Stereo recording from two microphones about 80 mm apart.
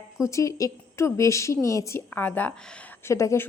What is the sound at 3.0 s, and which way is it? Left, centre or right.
Speech, left.